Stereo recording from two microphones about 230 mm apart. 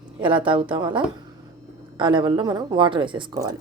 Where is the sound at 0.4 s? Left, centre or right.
Right.